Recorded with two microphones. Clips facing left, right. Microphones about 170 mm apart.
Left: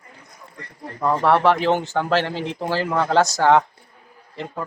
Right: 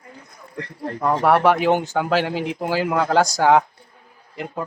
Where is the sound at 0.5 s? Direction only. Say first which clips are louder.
Right 8 dB; 90° right.